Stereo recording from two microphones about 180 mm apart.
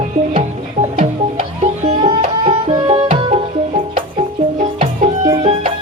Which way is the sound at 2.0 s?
25° right (ahead or behind).